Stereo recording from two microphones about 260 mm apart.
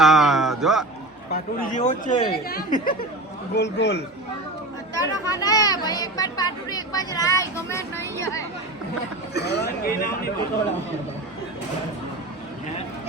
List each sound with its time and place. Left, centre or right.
0.0 s a sound: centre
1.3 s speech: left
4.9 s speech: centre
9.3 s speech: left